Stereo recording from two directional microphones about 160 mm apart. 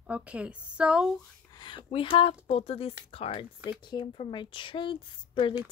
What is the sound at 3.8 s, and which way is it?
A woman's voice, 30° left (ahead or behind).